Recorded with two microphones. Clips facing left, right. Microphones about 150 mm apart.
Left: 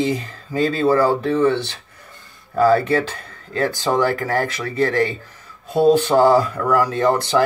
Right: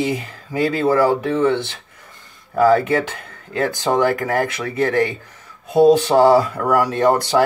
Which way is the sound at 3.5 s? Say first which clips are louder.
Right 1 dB; 15° right (ahead or behind).